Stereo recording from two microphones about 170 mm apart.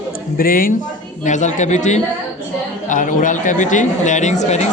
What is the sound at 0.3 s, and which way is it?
Speech, 55° left (ahead or behind).